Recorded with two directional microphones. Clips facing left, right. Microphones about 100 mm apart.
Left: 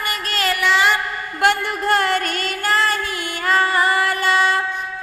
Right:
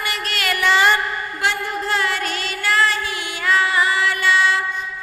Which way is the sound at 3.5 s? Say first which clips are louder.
Left 1 dB; 45° left (ahead or behind).